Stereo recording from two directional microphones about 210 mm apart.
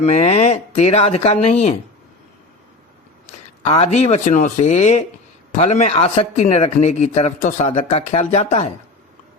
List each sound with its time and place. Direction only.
0.0 s speech: 30° left (ahead or behind)
3.6 s a man's voice: 30° left (ahead or behind)